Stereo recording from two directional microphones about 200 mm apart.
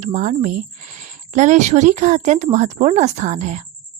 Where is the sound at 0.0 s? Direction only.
35° right (ahead or behind).